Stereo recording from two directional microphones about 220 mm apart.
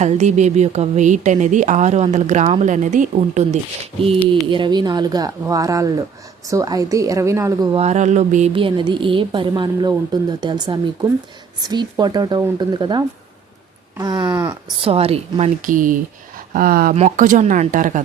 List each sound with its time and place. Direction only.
0.0 s speech: 30° right (ahead or behind)
4.4 s a woman's voice: 20° right (ahead or behind)
14.8 s a woman's voice: 25° right (ahead or behind)